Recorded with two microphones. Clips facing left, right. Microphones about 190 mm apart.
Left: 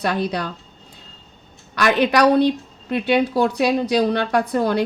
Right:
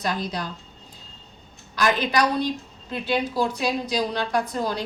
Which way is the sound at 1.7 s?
65° left (ahead or behind).